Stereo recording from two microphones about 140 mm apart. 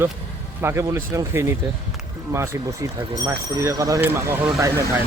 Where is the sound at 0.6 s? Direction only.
20° right (ahead or behind).